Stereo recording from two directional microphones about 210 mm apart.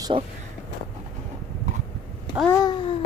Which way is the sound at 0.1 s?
25° right (ahead or behind).